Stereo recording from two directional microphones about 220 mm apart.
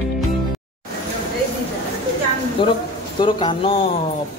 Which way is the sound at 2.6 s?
20° left (ahead or behind).